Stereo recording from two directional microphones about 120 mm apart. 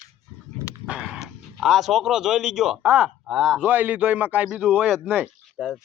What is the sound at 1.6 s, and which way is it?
Speech, centre (ahead or behind).